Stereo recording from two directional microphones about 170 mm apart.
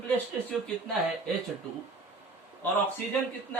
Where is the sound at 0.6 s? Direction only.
5° left (ahead or behind).